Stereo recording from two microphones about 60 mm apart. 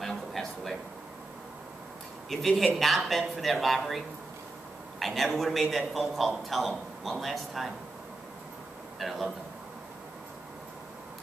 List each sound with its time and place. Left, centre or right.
0.0 s a sound: centre
2.2 s speech: centre
9.0 s speech: centre